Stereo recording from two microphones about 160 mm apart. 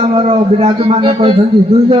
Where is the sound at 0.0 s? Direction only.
35° right (ahead or behind).